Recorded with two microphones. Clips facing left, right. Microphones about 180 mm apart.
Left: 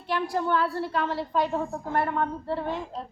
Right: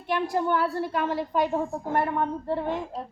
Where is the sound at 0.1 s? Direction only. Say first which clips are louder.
Right 1 dB; 20° right (ahead or behind).